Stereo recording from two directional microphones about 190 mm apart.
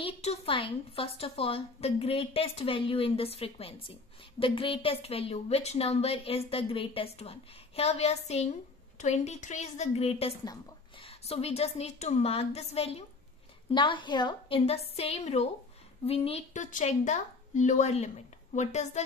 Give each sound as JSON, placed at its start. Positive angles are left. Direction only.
{"t": 0.0, "sound": "a woman's voice", "side_deg": 30}